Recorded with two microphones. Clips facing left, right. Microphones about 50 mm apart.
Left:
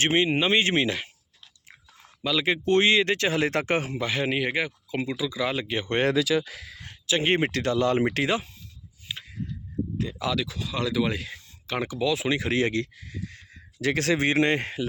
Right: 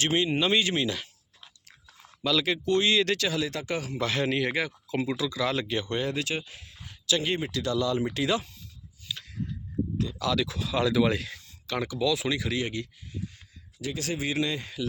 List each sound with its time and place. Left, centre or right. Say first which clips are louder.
0.0 s speech: left 3 dB; left
2.0 s chewing: even; centre
2.6 s speech: left 4 dB; left
3.9 s speech: left 1 dB; centre
6.1 s speech: left 7 dB; left
7.1 s speech: left 3 dB; left
7.3 s speech: left 4 dB; left
9.0 s a sound: left 1 dB; left
10.0 s speech: left 1 dB; left
10.3 s speech: right 2 dB; centre
11.3 s speech: left 2 dB; left
12.5 s speech: left 6 dB; left
13.8 s speech: left 8 dB; left